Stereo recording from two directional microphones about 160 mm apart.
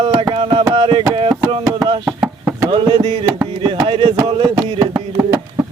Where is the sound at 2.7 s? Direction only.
30° right (ahead or behind).